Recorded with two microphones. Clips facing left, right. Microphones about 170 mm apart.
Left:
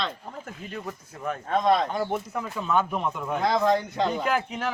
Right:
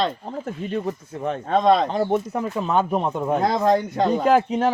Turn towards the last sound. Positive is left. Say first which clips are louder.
# right 9 dB
turn(degrees=-35)  # may be behind; listen again after turning